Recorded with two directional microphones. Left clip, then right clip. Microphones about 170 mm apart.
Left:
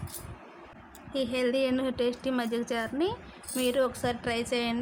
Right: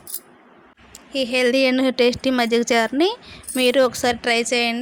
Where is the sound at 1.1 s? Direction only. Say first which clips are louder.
Right 10 dB; 25° right (ahead or behind).